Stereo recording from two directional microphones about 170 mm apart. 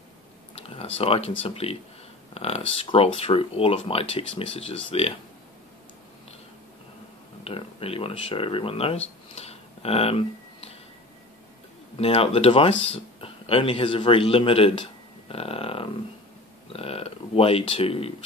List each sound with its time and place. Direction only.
0.6 s a sound: 35° left (ahead or behind)
1.4 s speech: 35° left (ahead or behind)
7.4 s speech: 35° left (ahead or behind)
12.0 s speech: 35° left (ahead or behind)